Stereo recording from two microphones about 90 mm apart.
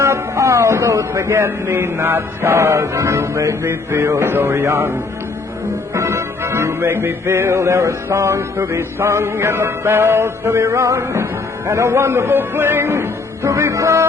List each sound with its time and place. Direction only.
0.0 s speech: 35° right (ahead or behind)
5.9 s music: 30° right (ahead or behind)